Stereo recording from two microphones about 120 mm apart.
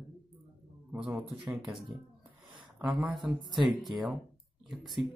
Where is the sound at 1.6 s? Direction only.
Centre (ahead or behind).